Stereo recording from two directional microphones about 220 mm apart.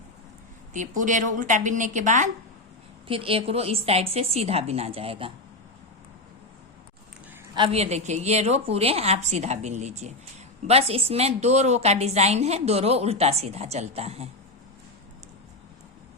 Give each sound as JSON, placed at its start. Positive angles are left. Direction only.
{"t": 0.7, "sound": "a woman's voice", "side_deg": -35}
{"t": 7.5, "sound": "a woman's voice", "side_deg": -25}